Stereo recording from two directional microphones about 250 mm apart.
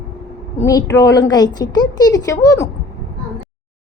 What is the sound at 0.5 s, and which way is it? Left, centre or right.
A woman's voice, centre.